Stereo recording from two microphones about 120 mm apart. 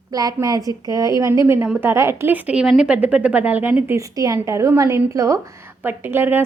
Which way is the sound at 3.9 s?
30° right (ahead or behind).